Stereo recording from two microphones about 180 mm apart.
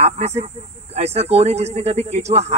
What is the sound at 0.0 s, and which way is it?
Speech, 35° right (ahead or behind).